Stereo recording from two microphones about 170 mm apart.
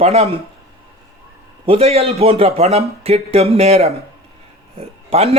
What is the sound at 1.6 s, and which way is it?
A man's voice, 35° right (ahead or behind).